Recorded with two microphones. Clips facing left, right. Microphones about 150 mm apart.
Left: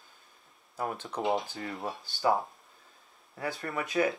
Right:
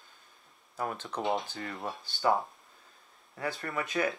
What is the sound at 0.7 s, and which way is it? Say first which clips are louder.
Speech: left 1 dB; 10° left (ahead or behind).